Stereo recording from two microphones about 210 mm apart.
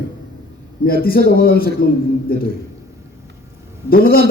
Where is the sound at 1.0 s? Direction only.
45° left (ahead or behind).